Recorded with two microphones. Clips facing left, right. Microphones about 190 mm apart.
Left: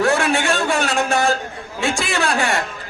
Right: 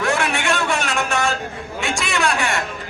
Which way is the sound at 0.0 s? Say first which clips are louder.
Left 4 dB; 35° left (ahead or behind).